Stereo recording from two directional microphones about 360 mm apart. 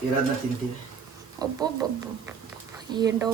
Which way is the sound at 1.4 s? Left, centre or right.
Centre.